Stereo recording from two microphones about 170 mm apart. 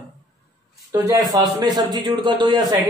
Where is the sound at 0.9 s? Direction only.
20° right (ahead or behind).